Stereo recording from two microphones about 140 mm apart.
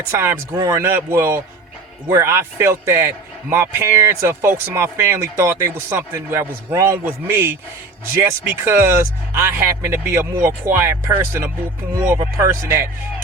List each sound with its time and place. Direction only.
0.1 s a man's voice: 15° right (ahead or behind)